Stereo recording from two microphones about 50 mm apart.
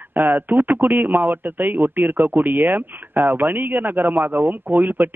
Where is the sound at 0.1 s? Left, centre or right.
Right.